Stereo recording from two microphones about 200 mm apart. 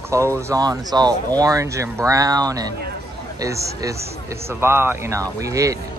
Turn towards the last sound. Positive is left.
turn(degrees=-15)  # may be behind; listen again after turning